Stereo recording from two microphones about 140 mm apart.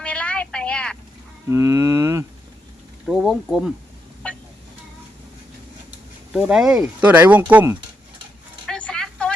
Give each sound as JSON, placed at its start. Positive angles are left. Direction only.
{"t": 0.0, "sound": "vehicle", "side_deg": 10}
{"t": 1.5, "sound": "speech", "side_deg": -20}
{"t": 3.1, "sound": "speech", "side_deg": -5}
{"t": 6.3, "sound": "speech", "side_deg": -5}
{"t": 8.6, "sound": "a sound", "side_deg": 5}